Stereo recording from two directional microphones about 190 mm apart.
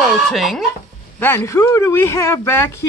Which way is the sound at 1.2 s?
10° left (ahead or behind).